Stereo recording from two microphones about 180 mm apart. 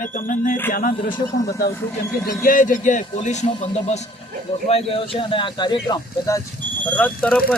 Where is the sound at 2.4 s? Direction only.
45° left (ahead or behind).